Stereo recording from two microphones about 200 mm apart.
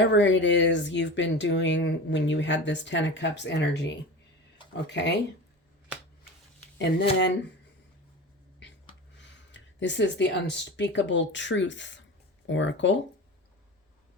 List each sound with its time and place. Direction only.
0.0 s speech: 65° left (ahead or behind)
9.1 s speech: 60° left (ahead or behind)